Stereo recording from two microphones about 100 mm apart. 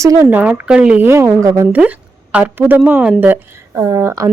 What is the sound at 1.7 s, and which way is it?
A woman's voice, 15° right (ahead or behind).